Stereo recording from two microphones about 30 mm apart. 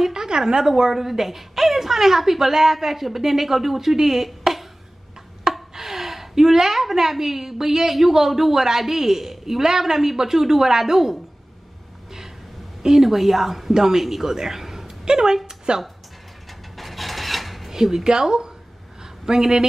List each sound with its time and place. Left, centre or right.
0.0 s a woman's voice: right
12.8 s a woman's voice: centre
15.0 s a woman's voice: right
15.4 s a sound: right
16.7 s filing: centre
17.6 s speech: centre
18.0 s a woman's voice: right
19.2 s a woman's voice: centre